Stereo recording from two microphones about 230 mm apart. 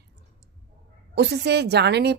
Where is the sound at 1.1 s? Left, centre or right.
Right.